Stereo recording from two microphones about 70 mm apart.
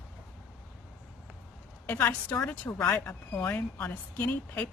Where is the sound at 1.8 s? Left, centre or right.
Left.